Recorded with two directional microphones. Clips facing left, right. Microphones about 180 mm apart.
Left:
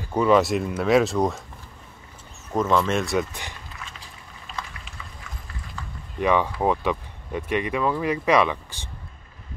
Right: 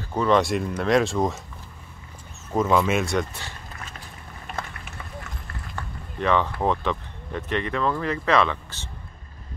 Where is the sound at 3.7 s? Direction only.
55° right (ahead or behind).